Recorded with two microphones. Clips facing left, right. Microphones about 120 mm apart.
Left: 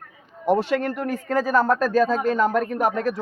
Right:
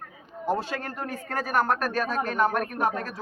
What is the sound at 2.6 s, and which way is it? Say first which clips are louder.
Speech: left 5 dB; 90° left.